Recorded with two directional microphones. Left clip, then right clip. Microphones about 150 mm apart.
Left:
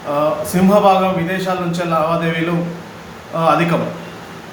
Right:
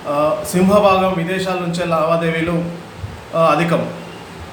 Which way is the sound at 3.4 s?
10° right (ahead or behind).